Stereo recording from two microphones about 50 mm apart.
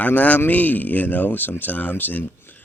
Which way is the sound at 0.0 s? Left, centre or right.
Left.